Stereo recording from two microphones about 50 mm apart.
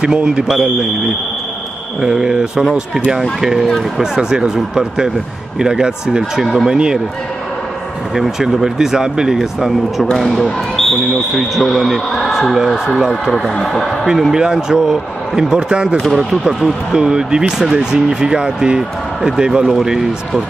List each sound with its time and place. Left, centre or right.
0.0 s speech: centre
2.0 s speech: centre
8.1 s speech: centre
10.1 s speech: centre
13.3 s speech: centre
14.0 s speech: centre
16.1 s speech: centre